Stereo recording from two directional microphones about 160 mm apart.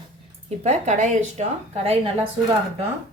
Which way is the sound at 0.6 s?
45° right (ahead or behind).